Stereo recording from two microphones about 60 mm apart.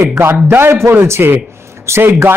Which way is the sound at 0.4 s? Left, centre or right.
Right.